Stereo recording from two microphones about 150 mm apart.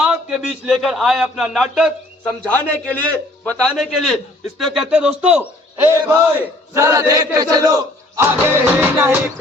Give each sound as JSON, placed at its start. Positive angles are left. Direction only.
{"t": 0.0, "sound": "a man's voice", "side_deg": -5}
{"t": 2.5, "sound": "a man's voice", "side_deg": 10}
{"t": 6.7, "sound": "chant", "side_deg": -20}
{"t": 7.5, "sound": "speech", "side_deg": -25}